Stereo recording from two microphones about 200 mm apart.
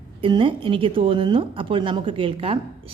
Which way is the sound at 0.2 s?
25° right (ahead or behind).